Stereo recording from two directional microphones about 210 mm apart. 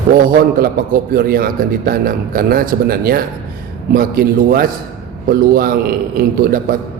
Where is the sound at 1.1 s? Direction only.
45° right (ahead or behind).